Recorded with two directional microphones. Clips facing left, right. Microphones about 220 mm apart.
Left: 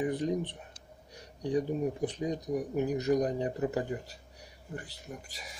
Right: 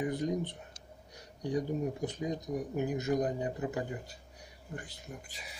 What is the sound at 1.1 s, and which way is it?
Speech, 30° left (ahead or behind).